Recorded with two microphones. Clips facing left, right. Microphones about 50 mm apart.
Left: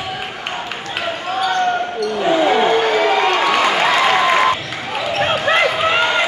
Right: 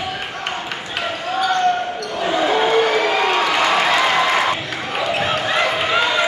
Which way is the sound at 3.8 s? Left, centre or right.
Centre.